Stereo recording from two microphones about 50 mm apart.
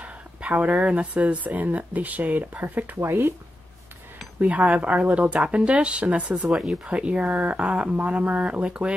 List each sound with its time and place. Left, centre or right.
0.0 s speech: right
3.0 s speech: right
4.4 s speech: right